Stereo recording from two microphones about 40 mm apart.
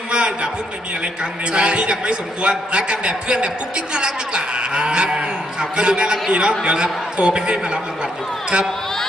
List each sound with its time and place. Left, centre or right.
0.1 s a sound: right
1.5 s a man's voice: right
6.7 s a man's voice: right